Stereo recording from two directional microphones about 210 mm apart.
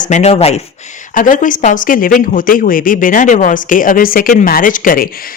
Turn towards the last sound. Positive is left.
turn(degrees=45)  # may be behind; listen again after turning